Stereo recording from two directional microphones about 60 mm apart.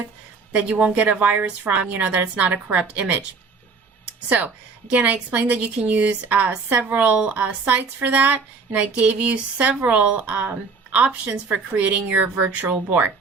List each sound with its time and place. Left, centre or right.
0.5 s speech: right
4.3 s speech: right